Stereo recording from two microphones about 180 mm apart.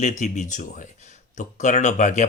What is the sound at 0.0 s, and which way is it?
Speech, 40° left (ahead or behind).